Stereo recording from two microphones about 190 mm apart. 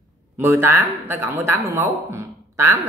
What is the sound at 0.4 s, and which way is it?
Speech, 15° right (ahead or behind).